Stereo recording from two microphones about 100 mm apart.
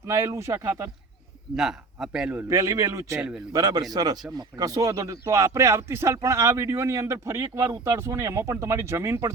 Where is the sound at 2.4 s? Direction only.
30° right (ahead or behind).